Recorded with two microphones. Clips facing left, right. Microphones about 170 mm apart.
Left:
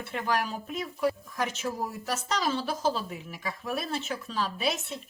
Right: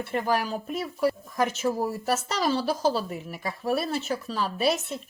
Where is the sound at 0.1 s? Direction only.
35° right (ahead or behind).